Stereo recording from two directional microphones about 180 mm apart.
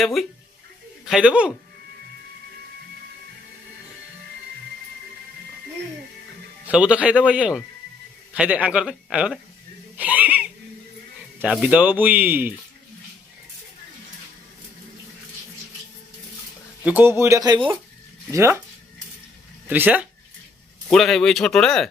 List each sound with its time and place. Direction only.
0.0 s speech: centre (ahead or behind)
6.7 s speech: 5° right (ahead or behind)
10.0 s wheeze: 10° right (ahead or behind)
11.3 s speech: 5° right (ahead or behind)
16.8 s speech: 10° right (ahead or behind)
19.6 s speech: 10° right (ahead or behind)
20.8 s speech: centre (ahead or behind)